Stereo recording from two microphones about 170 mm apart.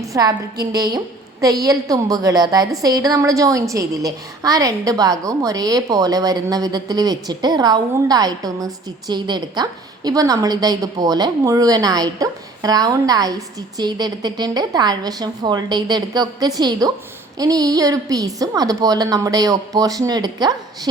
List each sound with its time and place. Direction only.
0.0 s a woman's voice: 20° right (ahead or behind)